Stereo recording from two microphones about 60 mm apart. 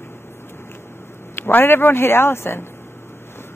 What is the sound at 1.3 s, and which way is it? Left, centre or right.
Speech, left.